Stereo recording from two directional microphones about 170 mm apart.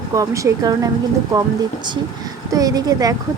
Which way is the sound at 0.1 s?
20° right (ahead or behind).